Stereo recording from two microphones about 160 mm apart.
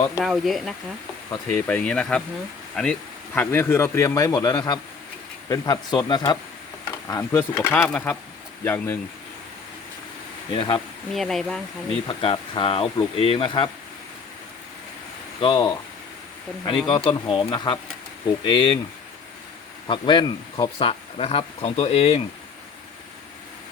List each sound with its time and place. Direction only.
0.2 s speech: centre (ahead or behind)
10.5 s speech: 30° left (ahead or behind)
11.1 s speech: centre (ahead or behind)
12.0 s speech: 35° left (ahead or behind)
15.4 s speech: 30° left (ahead or behind)
16.8 s speech: 30° left (ahead or behind)
19.9 s speech: 30° left (ahead or behind)